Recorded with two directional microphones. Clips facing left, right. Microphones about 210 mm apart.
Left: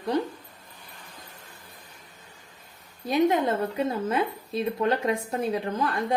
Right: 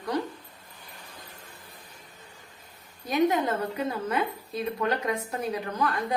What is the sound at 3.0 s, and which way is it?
A woman's voice, 25° left (ahead or behind).